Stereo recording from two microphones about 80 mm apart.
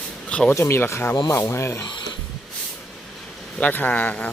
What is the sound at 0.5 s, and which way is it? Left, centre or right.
Speech, left.